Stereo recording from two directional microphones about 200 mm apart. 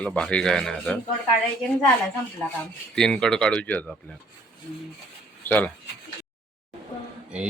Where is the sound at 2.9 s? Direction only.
5° left (ahead or behind).